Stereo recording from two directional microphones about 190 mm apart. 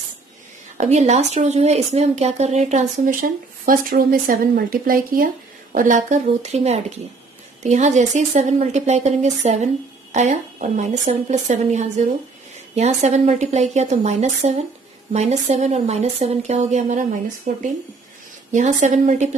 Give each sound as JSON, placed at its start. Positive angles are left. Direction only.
{"t": 0.7, "sound": "a woman's voice", "side_deg": -35}
{"t": 18.5, "sound": "a woman's voice", "side_deg": -40}